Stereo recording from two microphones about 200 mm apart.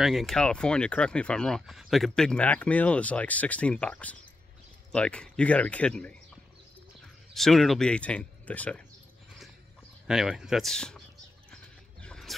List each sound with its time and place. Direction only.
0.0 s speech: centre (ahead or behind)
7.3 s speech: centre (ahead or behind)
10.0 s speech: centre (ahead or behind)
11.5 s a sound: 5° left (ahead or behind)